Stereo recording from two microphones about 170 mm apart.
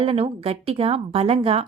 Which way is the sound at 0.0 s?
35° right (ahead or behind).